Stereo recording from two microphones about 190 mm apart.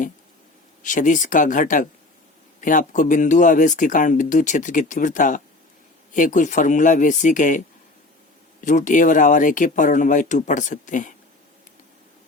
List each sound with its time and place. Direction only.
0.8 s speech: 40° left (ahead or behind)
8.6 s speech: 40° left (ahead or behind)